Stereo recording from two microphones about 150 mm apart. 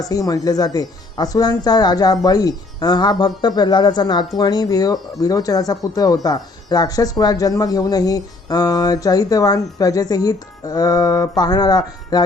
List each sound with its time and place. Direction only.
0.0 s speech: 25° left (ahead or behind)